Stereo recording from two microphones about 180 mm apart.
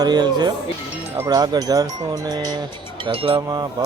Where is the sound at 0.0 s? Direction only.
25° right (ahead or behind).